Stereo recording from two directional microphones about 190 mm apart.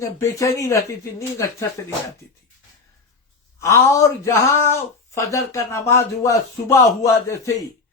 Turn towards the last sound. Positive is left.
turn(degrees=15)  # may be behind; listen again after turning